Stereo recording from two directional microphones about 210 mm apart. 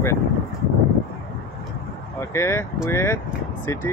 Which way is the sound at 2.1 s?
15° left (ahead or behind).